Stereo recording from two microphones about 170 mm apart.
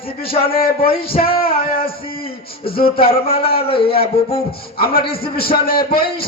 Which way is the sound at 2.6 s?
60° left (ahead or behind).